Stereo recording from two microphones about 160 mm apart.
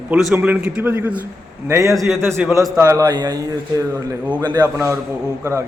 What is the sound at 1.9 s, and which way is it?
Speech, centre (ahead or behind).